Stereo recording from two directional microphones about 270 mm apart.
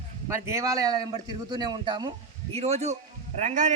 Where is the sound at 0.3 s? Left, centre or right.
Centre.